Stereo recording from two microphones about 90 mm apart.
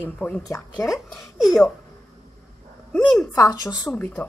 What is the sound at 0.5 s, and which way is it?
Speech, 35° left (ahead or behind).